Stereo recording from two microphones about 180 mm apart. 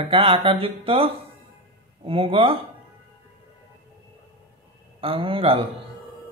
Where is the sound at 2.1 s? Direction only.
30° right (ahead or behind).